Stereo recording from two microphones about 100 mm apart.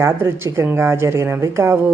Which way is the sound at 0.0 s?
25° right (ahead or behind).